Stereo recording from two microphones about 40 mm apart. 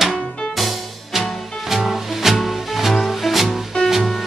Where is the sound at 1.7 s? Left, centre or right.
Centre.